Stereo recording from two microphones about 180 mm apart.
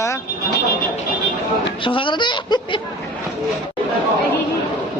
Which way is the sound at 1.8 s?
30° left (ahead or behind).